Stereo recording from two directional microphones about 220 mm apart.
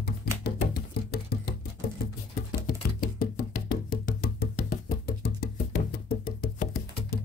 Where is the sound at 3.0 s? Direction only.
45° left (ahead or behind).